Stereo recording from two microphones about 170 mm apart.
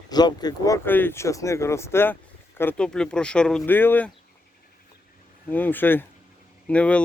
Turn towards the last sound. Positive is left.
turn(degrees=5)  # may be behind; listen again after turning